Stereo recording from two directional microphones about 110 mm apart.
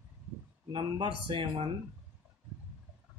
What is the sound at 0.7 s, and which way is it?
Speech, 45° right (ahead or behind).